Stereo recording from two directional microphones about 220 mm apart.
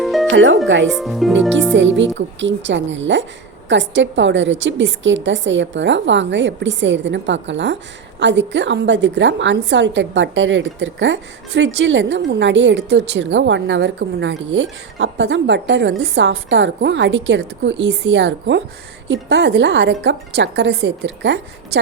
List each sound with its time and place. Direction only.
0.0 s music: centre (ahead or behind)
0.3 s speech: 60° right (ahead or behind)
0.9 s speech: centre (ahead or behind)
1.7 s a woman's voice: 55° right (ahead or behind)